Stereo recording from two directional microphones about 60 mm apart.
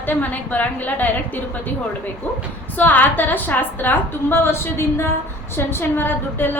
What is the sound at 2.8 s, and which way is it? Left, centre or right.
A woman's voice, left.